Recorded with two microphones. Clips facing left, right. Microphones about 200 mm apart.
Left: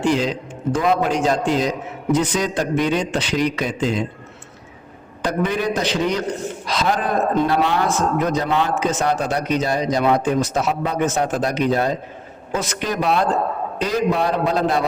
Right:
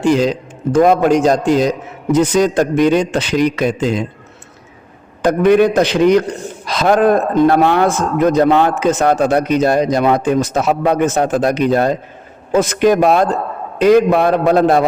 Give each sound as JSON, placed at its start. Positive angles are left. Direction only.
{"t": 0.0, "sound": "a man's voice", "side_deg": -45}
{"t": 5.2, "sound": "a man's voice", "side_deg": -55}
{"t": 13.8, "sound": "a man's voice", "side_deg": -60}